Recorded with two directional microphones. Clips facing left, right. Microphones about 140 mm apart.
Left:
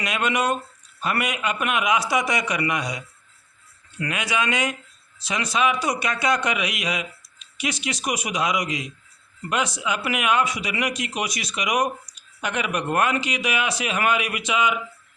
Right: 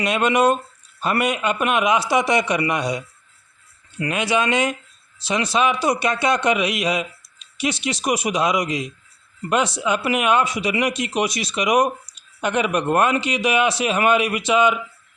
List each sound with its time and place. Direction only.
0.0 s speech: 30° right (ahead or behind)